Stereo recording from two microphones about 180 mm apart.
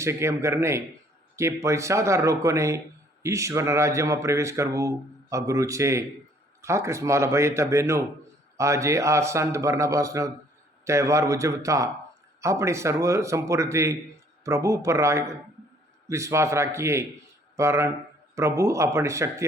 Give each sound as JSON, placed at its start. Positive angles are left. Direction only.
{"t": 0.0, "sound": "a man's voice", "side_deg": -15}